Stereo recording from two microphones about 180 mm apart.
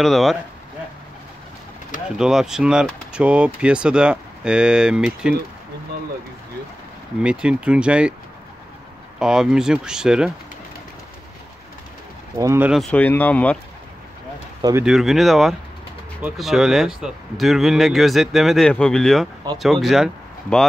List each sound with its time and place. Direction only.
0.0 s speech: centre (ahead or behind)
2.0 s speech: 5° right (ahead or behind)
7.2 s speech: 5° right (ahead or behind)
9.2 s speech: 5° right (ahead or behind)
12.4 s speech: 15° right (ahead or behind); by 13.6 s 10° left (ahead or behind)
14.6 s speech: 20° right (ahead or behind)
14.9 s speech: centre (ahead or behind)